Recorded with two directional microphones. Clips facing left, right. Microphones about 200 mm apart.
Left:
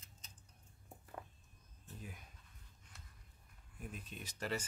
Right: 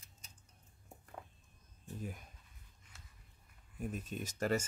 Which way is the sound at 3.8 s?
45° right (ahead or behind).